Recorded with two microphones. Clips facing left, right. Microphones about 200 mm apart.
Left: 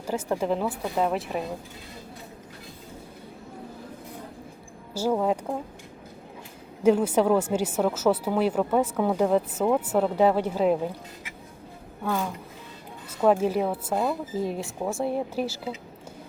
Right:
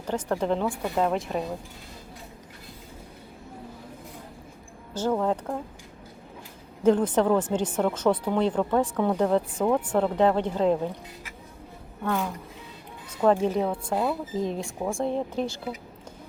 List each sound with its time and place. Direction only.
0.1 s a woman's voice: 5° left (ahead or behind)
4.9 s speech: 10° left (ahead or behind)
6.8 s speech: 10° left (ahead or behind)
12.0 s a woman's voice: 5° left (ahead or behind)